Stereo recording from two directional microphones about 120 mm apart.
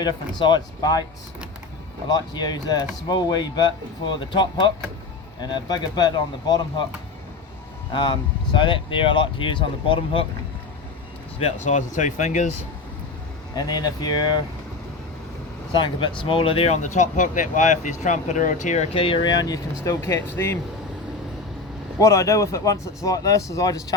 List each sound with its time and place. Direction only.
0.0 s speech: 40° left (ahead or behind)
2.1 s speech: 35° left (ahead or behind)
7.9 s speech: 45° left (ahead or behind)
11.3 s speech: 65° left (ahead or behind); by 12.5 s 90° left
13.6 s speech: 35° left (ahead or behind)
15.7 s speech: 40° left (ahead or behind); by 18.9 s 85° left
18.9 s speech: 45° left (ahead or behind)
19.8 s speech: 25° left (ahead or behind)
21.9 s speech: 25° left (ahead or behind)